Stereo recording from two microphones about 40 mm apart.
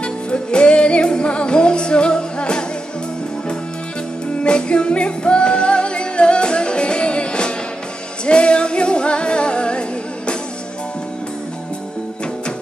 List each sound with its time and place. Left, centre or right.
0.0 s music: left
4.4 s music: left